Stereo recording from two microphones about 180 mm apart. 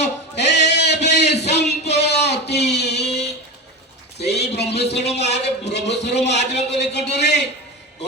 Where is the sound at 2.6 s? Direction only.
70° left (ahead or behind).